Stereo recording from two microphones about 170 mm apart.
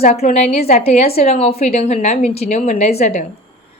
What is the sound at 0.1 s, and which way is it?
A woman's voice, 40° left (ahead or behind).